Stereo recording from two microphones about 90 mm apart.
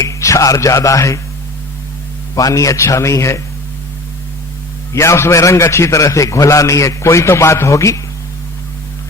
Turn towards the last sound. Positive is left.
turn(degrees=35)  # may be behind; listen again after turning